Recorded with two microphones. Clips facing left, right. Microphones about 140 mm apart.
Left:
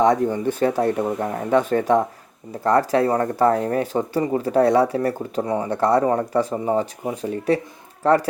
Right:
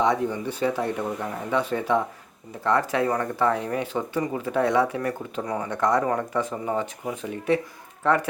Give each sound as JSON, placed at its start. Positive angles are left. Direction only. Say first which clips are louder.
{"t": 0.0, "sound": "speech", "louder": "left 5 dB", "side_deg": 45}